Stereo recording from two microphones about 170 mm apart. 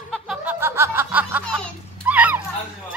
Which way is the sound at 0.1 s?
Centre (ahead or behind).